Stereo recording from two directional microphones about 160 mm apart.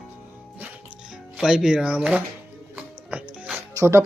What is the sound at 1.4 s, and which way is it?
Speech, 5° right (ahead or behind).